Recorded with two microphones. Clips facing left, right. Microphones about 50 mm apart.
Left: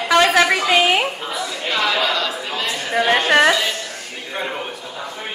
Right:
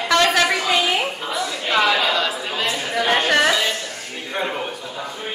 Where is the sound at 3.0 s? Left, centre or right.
Left.